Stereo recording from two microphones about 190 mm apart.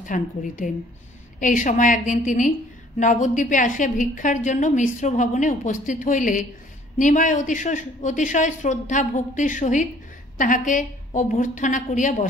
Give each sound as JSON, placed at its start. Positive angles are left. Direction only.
{"t": 0.0, "sound": "a woman's voice", "side_deg": 45}